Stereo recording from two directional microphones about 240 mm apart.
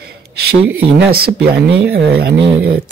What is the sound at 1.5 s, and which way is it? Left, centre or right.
Speech, right.